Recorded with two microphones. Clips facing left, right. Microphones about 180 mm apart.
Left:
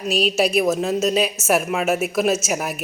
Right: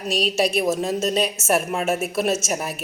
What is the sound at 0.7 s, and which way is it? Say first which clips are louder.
Speech: left 2 dB; 30° right (ahead or behind).